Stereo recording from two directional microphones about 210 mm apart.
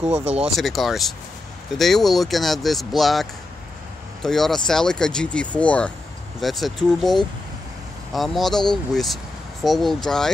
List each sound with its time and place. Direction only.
0.0 s speech: 30° right (ahead or behind)
0.6 s speech: centre (ahead or behind)